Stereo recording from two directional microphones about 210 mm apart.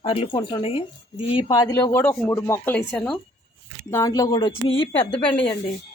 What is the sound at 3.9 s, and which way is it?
A woman's voice, 15° left (ahead or behind).